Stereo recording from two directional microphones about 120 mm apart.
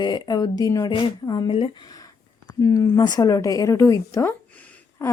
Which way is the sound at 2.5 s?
30° left (ahead or behind).